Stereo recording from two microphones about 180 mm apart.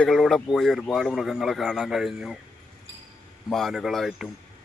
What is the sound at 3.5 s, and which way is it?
Speech, centre (ahead or behind).